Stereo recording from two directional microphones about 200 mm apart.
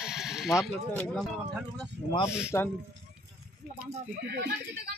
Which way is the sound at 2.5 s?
10° left (ahead or behind).